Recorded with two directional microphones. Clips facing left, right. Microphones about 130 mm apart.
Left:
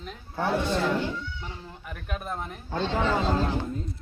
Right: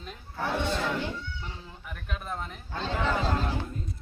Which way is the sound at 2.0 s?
15° left (ahead or behind).